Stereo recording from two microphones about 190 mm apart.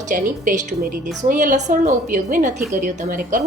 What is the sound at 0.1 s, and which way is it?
A woman's voice, 45° right (ahead or behind).